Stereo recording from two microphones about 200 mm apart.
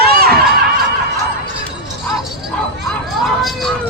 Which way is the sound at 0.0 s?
50° right (ahead or behind).